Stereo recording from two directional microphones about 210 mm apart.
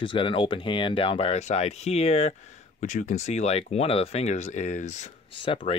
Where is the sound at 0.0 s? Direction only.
25° left (ahead or behind).